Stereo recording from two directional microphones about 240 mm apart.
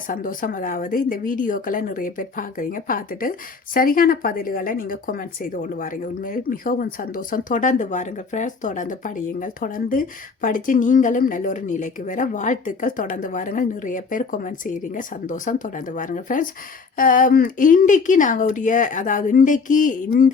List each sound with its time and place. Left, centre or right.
0.1 s speech: left